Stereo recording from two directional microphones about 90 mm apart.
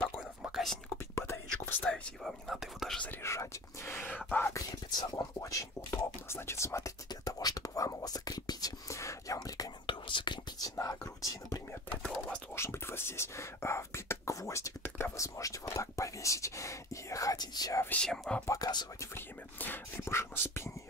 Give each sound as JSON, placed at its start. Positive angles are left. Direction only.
{"t": 0.2, "sound": "whispering", "side_deg": -10}
{"t": 1.1, "sound": "whispering", "side_deg": 30}
{"t": 1.8, "sound": "speech", "side_deg": 5}
{"t": 3.0, "sound": "speech", "side_deg": 20}
{"t": 4.5, "sound": "speech", "side_deg": 40}
{"t": 7.1, "sound": "whispering", "side_deg": 45}
{"t": 9.8, "sound": "whispering", "side_deg": 65}
{"t": 10.8, "sound": "speech", "side_deg": 40}
{"t": 12.5, "sound": "speech", "side_deg": 30}
{"t": 18.0, "sound": "speech", "side_deg": 5}
{"t": 18.5, "sound": "speech", "side_deg": 50}
{"t": 18.9, "sound": "speech", "side_deg": 25}